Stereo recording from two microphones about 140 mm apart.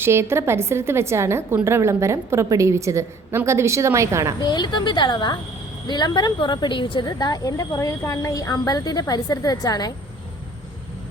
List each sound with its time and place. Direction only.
0.0 s a woman's voice: 20° right (ahead or behind)
4.4 s a woman's voice: 30° left (ahead or behind)